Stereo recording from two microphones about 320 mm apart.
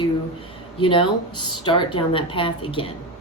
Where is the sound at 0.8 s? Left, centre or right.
Centre.